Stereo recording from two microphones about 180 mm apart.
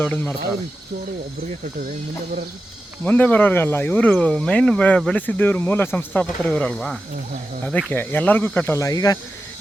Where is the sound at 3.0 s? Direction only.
10° left (ahead or behind).